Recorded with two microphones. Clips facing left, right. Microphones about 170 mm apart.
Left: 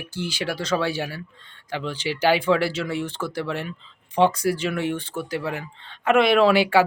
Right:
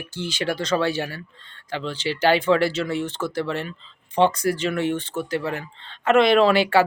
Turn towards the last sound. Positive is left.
turn(degrees=10)  # may be behind; listen again after turning